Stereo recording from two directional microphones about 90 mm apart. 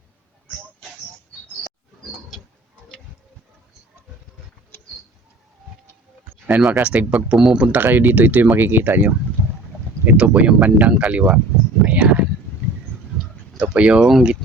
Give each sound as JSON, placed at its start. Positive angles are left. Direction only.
{"t": 6.6, "sound": "speech", "side_deg": -5}
{"t": 11.8, "sound": "a sound", "side_deg": -15}
{"t": 13.6, "sound": "speech", "side_deg": -10}